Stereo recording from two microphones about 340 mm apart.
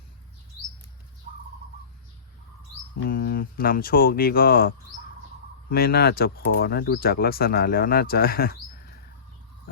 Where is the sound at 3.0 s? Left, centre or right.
Left.